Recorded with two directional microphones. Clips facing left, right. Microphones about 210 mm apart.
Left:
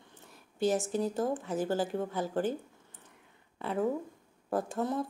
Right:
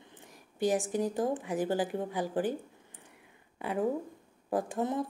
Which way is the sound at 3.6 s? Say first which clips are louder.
Even; 15° right (ahead or behind).